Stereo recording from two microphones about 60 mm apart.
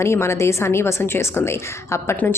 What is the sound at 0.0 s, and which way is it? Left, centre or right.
A woman's voice, left.